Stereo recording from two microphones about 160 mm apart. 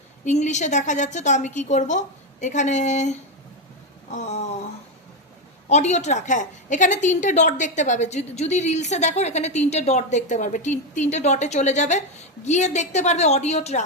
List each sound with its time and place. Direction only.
0.3 s a woman's voice: 45° left (ahead or behind)
5.6 s a woman's voice: 45° left (ahead or behind)